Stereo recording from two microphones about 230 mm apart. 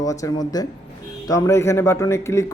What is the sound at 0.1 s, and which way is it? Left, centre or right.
Speech, centre.